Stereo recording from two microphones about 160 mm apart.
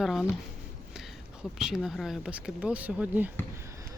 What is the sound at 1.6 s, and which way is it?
Speech, centre (ahead or behind).